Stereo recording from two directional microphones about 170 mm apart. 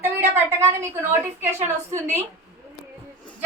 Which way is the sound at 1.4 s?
40° right (ahead or behind).